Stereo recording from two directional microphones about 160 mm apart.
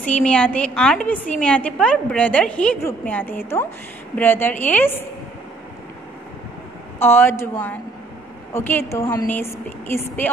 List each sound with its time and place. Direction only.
0.0 s a woman's voice: 5° left (ahead or behind)
7.0 s a woman's voice: 15° left (ahead or behind)